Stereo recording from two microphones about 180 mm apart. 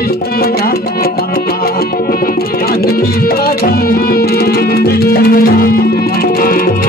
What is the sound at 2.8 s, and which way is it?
Music, 55° left (ahead or behind).